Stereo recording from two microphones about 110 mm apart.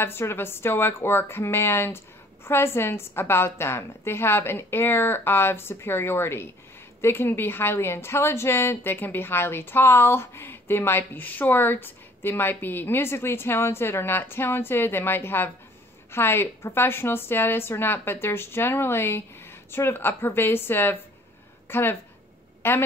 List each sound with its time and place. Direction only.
0.0 s a woman's voice: 20° left (ahead or behind)